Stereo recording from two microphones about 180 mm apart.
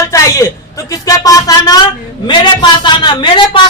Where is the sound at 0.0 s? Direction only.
15° left (ahead or behind).